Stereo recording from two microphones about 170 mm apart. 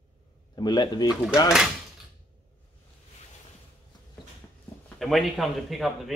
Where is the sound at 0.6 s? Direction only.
25° left (ahead or behind).